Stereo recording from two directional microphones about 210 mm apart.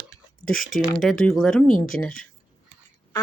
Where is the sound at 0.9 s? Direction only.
5° left (ahead or behind).